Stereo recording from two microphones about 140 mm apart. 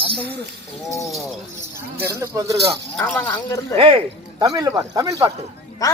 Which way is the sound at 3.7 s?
40° right (ahead or behind).